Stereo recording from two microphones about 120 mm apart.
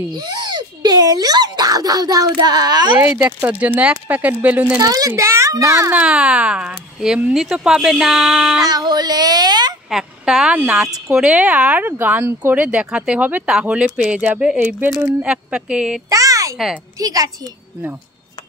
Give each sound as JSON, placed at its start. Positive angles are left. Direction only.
{"t": 0.1, "sound": "a child's voice", "side_deg": -35}
{"t": 3.2, "sound": "speech", "side_deg": -15}
{"t": 4.7, "sound": "a child's voice", "side_deg": -30}
{"t": 5.9, "sound": "speech", "side_deg": -10}
{"t": 8.6, "sound": "child singing", "side_deg": -35}
{"t": 9.8, "sound": "speech", "side_deg": -5}
{"t": 16.1, "sound": "a sound", "side_deg": -30}
{"t": 17.0, "sound": "a woman's voice", "side_deg": -30}